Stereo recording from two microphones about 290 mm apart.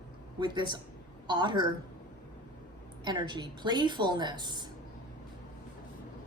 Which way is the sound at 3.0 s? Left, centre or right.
Centre.